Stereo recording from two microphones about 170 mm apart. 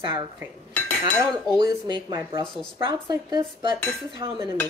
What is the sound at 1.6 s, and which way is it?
A woman's voice, 25° right (ahead or behind).